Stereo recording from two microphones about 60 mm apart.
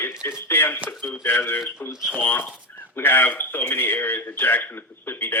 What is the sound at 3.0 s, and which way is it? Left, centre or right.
A man's voice, left.